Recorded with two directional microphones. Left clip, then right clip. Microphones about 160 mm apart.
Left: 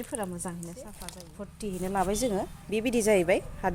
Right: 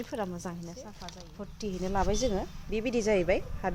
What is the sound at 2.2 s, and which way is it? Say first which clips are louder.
A woman's voice: left 1 dB; 45° left (ahead or behind).